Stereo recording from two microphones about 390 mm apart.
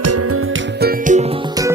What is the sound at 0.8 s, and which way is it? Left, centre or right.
Music, centre.